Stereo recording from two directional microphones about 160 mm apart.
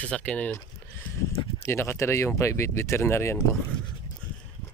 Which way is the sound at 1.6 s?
15° left (ahead or behind).